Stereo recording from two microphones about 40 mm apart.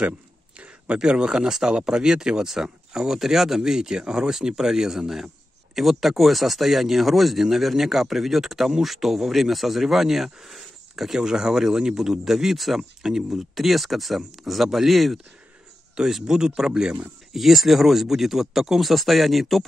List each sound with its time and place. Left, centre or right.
0.9 s speech: right; by 11.1 s centre
11.1 s speech: centre